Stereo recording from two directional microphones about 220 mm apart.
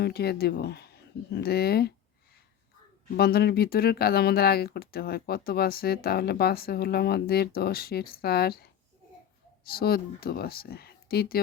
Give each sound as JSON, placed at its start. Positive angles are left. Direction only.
{"t": 0.0, "sound": "speech", "side_deg": 45}
{"t": 3.2, "sound": "speech", "side_deg": 45}